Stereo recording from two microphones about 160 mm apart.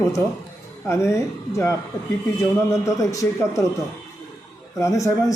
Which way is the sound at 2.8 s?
20° left (ahead or behind).